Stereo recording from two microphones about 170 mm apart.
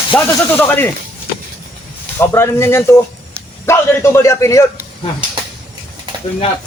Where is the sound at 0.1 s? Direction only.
10° left (ahead or behind).